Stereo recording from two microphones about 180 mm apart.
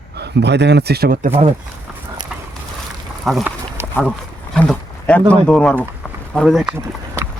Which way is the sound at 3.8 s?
15° right (ahead or behind).